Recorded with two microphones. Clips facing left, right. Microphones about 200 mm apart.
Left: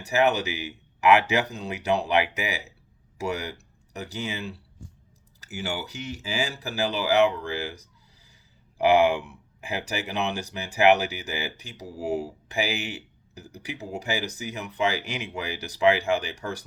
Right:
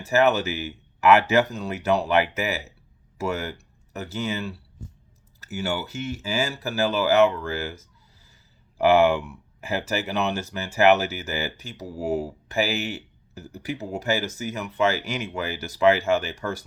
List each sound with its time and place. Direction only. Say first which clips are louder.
0.0 s speech: right 3 dB; 15° left (ahead or behind)
8.8 s speech: right 2 dB; 15° left (ahead or behind)